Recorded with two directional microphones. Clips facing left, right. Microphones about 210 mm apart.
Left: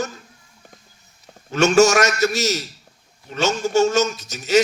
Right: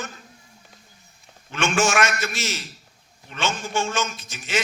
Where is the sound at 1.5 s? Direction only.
40° left (ahead or behind).